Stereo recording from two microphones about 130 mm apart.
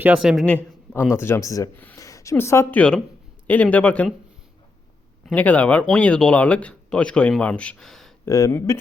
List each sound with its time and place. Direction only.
0.2 s speech: centre (ahead or behind)
0.4 s a sound: 10° left (ahead or behind)
1.1 s speech: 20° left (ahead or behind)
2.0 s a sound: 25° left (ahead or behind)
2.3 s speech: 20° left (ahead or behind)
5.2 s speech: 10° left (ahead or behind)
8.2 s speech: 25° left (ahead or behind)